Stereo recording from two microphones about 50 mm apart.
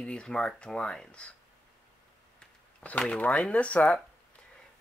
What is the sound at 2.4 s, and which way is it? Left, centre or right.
Speech, left.